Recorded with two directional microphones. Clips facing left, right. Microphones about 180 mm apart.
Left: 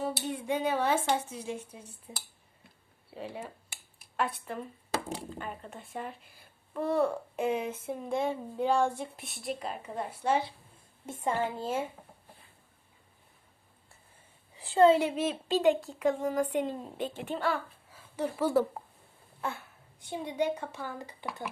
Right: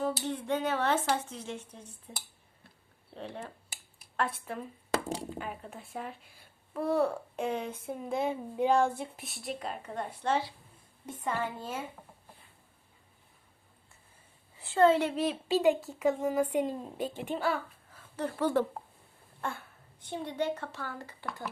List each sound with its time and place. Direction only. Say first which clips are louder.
0.0 s a woman's voice: right 1 dB; 10° left (ahead or behind)
11.0 s a woman's voice: left 3 dB; 25° left (ahead or behind)
14.6 s a woman's voice: left 2 dB; 15° left (ahead or behind)
15.2 s a child's voice: even; centre (ahead or behind)
17.9 s speech: left 2 dB; 10° left (ahead or behind)
19.4 s a sound: left 1 dB; 5° left (ahead or behind)
20.1 s a woman's voice: left 2 dB; 15° left (ahead or behind)